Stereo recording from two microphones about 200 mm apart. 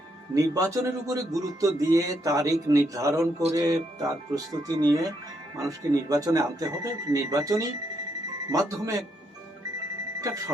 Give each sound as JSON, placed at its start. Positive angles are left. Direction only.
{"t": 0.3, "sound": "speech", "side_deg": -15}
{"t": 10.2, "sound": "speech", "side_deg": -15}